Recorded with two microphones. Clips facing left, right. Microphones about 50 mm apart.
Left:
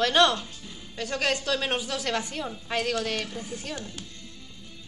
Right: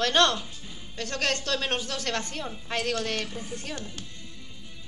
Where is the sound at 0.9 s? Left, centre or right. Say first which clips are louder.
Left 2 dB; centre.